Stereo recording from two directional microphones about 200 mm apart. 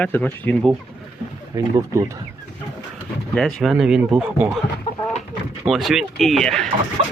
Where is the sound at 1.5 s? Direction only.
15° right (ahead or behind).